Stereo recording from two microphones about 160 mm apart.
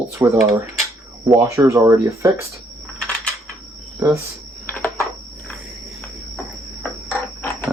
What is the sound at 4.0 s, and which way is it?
Speech, 20° right (ahead or behind).